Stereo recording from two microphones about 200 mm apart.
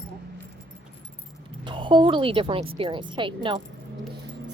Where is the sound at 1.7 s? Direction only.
25° right (ahead or behind).